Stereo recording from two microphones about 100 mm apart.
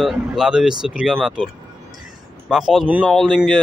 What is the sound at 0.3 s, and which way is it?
Speech, 10° right (ahead or behind).